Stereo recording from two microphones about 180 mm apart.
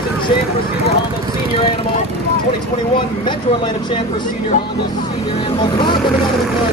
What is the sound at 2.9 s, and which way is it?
A man's voice, 25° left (ahead or behind).